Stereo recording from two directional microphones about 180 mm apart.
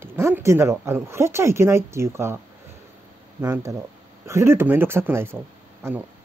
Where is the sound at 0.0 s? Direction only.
15° right (ahead or behind).